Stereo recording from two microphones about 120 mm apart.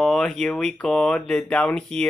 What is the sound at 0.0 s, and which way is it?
Speech, 5° left (ahead or behind).